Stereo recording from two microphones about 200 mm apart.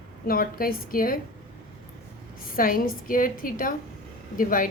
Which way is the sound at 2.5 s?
45° left (ahead or behind).